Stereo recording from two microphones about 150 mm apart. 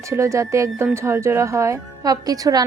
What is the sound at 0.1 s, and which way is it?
Speech, 20° right (ahead or behind).